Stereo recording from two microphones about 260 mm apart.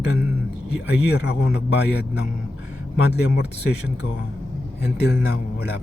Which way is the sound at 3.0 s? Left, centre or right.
Left.